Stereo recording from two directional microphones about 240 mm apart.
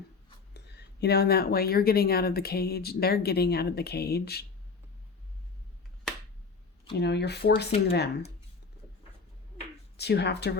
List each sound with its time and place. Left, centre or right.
0.5 s speech: left
6.9 s speech: left
10.0 s speech: left